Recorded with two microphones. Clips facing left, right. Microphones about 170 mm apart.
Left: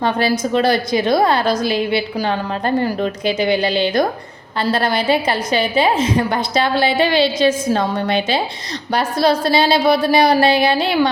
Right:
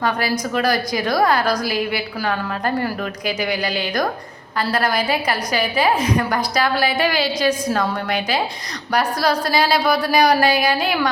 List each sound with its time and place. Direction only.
0.0 s a woman's voice: 25° left (ahead or behind)